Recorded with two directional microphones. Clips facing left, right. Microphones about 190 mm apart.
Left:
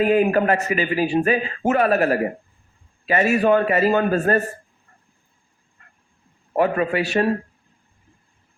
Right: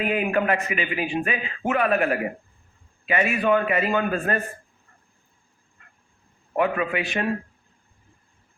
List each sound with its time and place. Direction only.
0.0 s a man's voice: 40° left (ahead or behind)
5.8 s dog: 35° left (ahead or behind)
6.6 s a man's voice: 40° left (ahead or behind)